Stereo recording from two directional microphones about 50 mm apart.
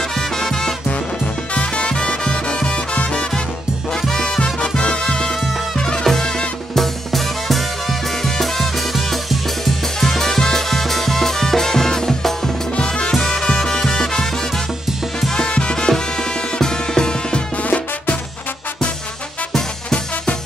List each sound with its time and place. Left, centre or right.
0.2 s music: centre
0.8 s music: left
6.8 s music: centre
17.6 s music: left
19.5 s music: centre